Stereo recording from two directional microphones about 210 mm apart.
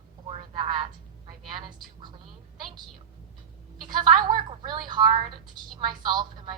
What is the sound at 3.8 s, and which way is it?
A woman's voice, 20° right (ahead or behind).